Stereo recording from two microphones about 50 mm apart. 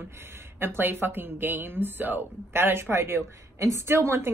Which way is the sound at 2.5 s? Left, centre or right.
Right.